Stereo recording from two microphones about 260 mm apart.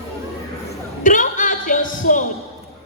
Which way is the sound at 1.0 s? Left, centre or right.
Left.